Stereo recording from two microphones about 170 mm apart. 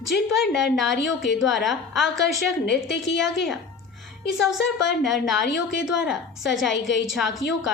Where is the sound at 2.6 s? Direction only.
90° left.